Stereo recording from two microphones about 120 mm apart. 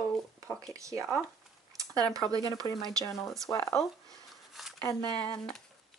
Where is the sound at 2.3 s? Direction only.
30° right (ahead or behind).